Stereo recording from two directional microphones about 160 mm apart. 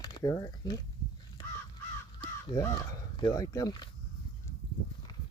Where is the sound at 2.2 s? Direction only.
20° left (ahead or behind).